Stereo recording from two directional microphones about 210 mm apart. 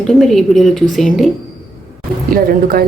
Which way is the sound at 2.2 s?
45° right (ahead or behind).